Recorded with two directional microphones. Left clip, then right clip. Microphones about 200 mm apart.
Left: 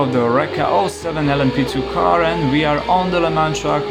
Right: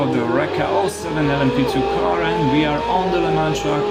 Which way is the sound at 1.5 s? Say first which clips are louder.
Right 1 dB; 50° left (ahead or behind).